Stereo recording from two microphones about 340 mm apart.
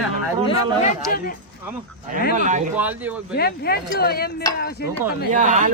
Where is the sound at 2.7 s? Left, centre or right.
Centre.